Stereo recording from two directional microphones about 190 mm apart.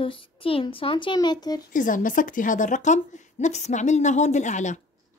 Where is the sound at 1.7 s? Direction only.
45° left (ahead or behind).